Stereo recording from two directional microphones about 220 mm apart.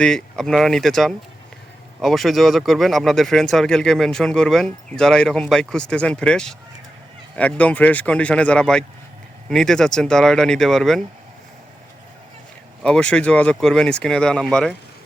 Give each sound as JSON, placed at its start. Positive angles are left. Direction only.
{"t": 0.0, "sound": "speech", "side_deg": 5}
{"t": 12.8, "sound": "speech", "side_deg": 5}